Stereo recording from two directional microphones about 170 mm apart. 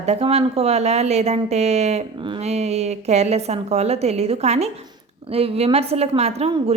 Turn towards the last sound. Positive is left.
turn(degrees=-35)  # may be behind; listen again after turning